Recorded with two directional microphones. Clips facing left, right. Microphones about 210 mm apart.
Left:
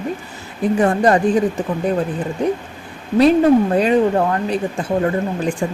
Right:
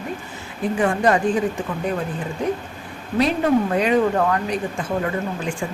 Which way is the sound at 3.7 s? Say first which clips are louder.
Left 3 dB; 35° left (ahead or behind).